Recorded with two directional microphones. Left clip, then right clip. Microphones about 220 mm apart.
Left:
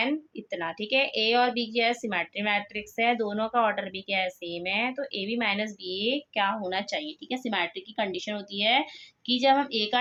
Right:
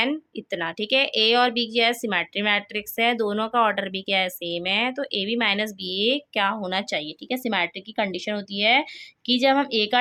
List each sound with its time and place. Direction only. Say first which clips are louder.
0.0 s speech: right 4 dB; 40° right (ahead or behind)